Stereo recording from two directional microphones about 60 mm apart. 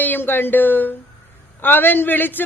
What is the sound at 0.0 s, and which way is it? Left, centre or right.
A woman's voice, left.